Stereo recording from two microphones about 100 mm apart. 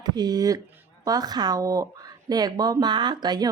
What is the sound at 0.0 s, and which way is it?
A woman's voice, 45° right (ahead or behind).